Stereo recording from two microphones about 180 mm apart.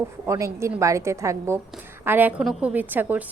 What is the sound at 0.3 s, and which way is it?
A woman's voice, 15° right (ahead or behind).